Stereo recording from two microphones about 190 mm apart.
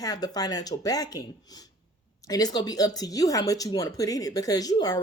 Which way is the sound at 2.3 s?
20° left (ahead or behind).